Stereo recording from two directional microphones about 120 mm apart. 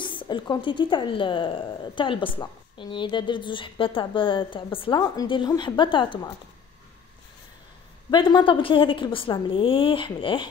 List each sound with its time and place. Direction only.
0.0 s a woman's voice: 40° left (ahead or behind)
8.1 s a woman's voice: 40° left (ahead or behind)